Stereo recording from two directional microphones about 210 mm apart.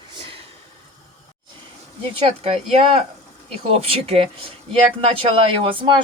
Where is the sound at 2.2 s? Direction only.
30° right (ahead or behind).